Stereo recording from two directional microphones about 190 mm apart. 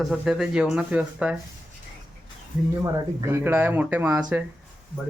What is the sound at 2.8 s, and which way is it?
Speech, 15° right (ahead or behind).